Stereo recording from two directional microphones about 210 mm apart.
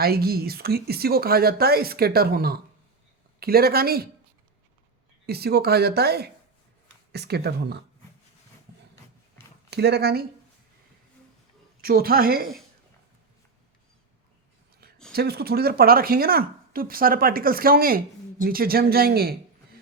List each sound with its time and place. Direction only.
0.0 s speech: 45° right (ahead or behind)
5.2 s speech: 50° right (ahead or behind)
9.6 s speech: 50° right (ahead or behind)
11.8 s speech: 45° right (ahead or behind)
15.1 s speech: 50° right (ahead or behind)